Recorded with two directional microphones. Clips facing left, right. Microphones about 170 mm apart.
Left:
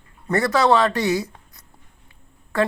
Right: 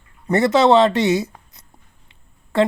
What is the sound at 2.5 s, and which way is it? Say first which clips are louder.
Speech: right 4 dB; 25° right (ahead or behind).